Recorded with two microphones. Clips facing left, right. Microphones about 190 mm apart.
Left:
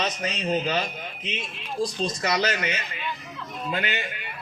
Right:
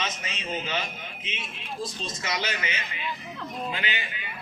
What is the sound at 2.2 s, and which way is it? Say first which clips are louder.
A man's voice: left 5 dB; 45° left (ahead or behind).